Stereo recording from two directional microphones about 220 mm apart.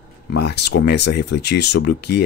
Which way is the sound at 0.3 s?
50° left (ahead or behind).